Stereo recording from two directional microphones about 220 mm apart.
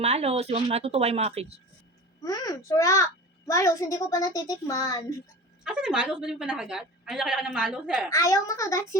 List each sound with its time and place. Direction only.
0.0 s speech: 30° right (ahead or behind)
2.2 s a child's voice: 15° left (ahead or behind)
5.6 s a woman's voice: 5° right (ahead or behind)
8.1 s a child's voice: 15° left (ahead or behind)